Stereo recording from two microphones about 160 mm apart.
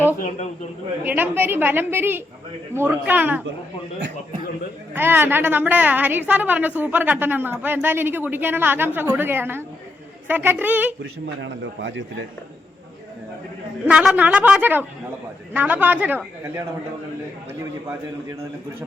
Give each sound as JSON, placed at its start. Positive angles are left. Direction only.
{"t": 0.2, "sound": "speech", "side_deg": 45}
{"t": 1.0, "sound": "a woman's voice", "side_deg": -10}
{"t": 4.9, "sound": "a woman's voice", "side_deg": -15}
{"t": 13.8, "sound": "a woman's voice", "side_deg": -10}